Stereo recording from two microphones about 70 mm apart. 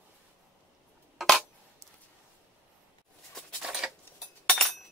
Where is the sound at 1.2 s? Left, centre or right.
Centre.